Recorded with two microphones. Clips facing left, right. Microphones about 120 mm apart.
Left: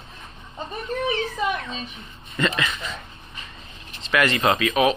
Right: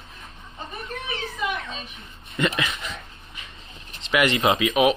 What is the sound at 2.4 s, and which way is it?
Speech, 10° right (ahead or behind).